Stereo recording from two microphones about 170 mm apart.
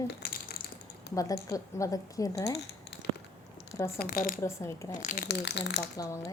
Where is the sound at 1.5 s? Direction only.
20° left (ahead or behind).